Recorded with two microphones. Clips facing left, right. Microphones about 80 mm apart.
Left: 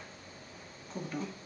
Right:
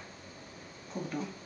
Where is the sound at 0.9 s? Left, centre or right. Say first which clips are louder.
Right 2 dB; right.